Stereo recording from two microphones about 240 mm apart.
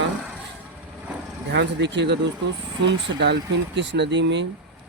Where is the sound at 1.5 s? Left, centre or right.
Right.